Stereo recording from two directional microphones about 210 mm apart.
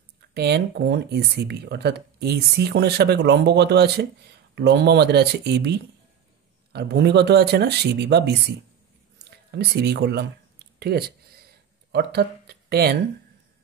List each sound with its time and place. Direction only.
0.3 s speech: 50° right (ahead or behind)
9.6 s speech: 50° right (ahead or behind)
10.8 s a sound: 50° right (ahead or behind)
11.9 s speech: 50° right (ahead or behind)